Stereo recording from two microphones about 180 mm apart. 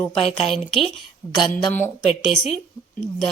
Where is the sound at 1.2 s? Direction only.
10° left (ahead or behind).